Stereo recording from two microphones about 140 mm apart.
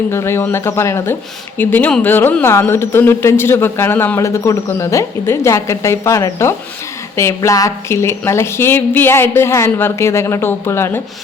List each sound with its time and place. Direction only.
0.1 s a woman's voice: 15° left (ahead or behind)